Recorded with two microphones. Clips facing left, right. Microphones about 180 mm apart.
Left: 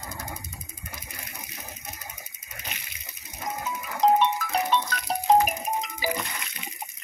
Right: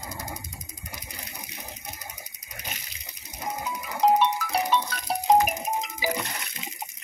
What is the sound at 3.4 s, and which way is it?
Music, 10° right (ahead or behind).